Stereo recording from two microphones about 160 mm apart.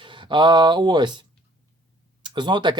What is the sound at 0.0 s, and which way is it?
Speech, 30° right (ahead or behind).